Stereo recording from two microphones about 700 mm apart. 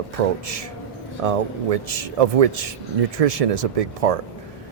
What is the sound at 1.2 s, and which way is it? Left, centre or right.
Speech, right.